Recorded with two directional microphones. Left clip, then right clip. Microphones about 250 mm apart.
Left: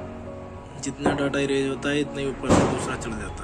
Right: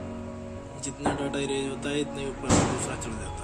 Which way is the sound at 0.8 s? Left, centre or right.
Centre.